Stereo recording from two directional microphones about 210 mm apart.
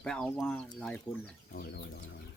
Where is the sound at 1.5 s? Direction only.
50° left (ahead or behind).